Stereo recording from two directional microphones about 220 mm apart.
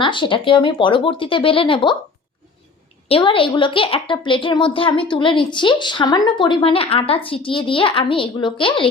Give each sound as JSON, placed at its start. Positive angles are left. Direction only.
{"t": 0.0, "sound": "a woman's voice", "side_deg": 20}
{"t": 3.1, "sound": "a woman's voice", "side_deg": 25}